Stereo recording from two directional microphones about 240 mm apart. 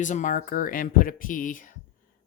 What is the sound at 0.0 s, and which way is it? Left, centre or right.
Speech, left.